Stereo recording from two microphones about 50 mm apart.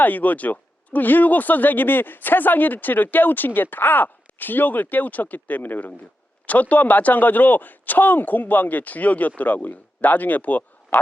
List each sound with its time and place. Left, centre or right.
0.0 s speech: left